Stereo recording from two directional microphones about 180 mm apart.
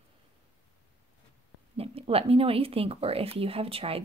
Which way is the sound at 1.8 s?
30° right (ahead or behind).